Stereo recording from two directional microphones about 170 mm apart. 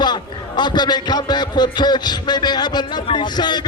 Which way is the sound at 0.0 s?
25° left (ahead or behind).